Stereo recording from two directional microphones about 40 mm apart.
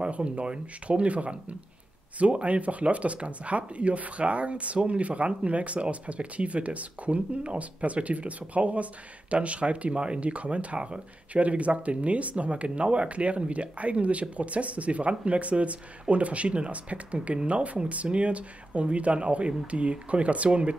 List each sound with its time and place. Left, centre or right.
0.0 s speech: right